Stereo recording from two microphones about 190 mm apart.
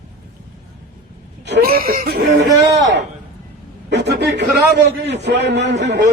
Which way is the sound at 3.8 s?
60° right (ahead or behind).